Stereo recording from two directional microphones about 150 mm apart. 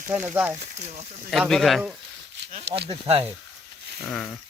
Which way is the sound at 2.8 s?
40° right (ahead or behind).